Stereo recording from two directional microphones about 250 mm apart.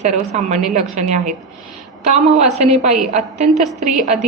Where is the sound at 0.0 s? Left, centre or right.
Right.